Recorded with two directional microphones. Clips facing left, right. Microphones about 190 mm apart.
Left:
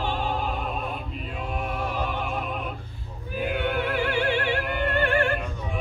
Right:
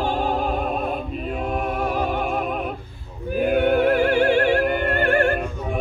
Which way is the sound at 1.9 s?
50° right (ahead or behind).